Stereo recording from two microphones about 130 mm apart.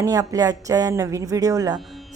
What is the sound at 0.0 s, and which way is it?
Speech, 25° right (ahead or behind).